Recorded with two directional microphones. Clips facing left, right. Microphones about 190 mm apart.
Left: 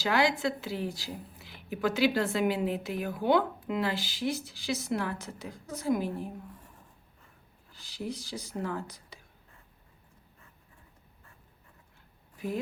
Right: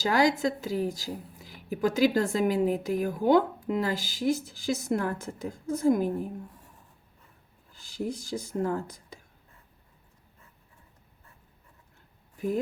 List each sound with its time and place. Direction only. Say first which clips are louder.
0.0 s a woman's voice: right 3 dB; 40° right (ahead or behind)
7.9 s a woman's voice: right 5 dB; 50° right (ahead or behind)